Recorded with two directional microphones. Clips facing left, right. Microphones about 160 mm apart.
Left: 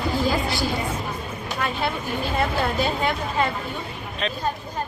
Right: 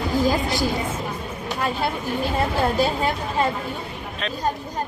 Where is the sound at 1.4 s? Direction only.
35° right (ahead or behind).